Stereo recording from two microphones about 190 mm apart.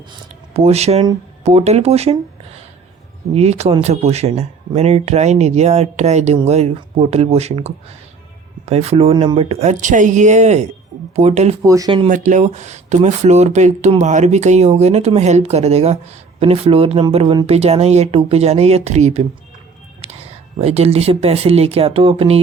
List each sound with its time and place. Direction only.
0.5 s speech: 35° right (ahead or behind)
3.3 s speech: 35° right (ahead or behind)
11.6 s speech: 20° right (ahead or behind)
12.0 s speech: 40° right (ahead or behind)
20.0 s whispering: 35° right (ahead or behind)
20.6 s speech: 30° right (ahead or behind)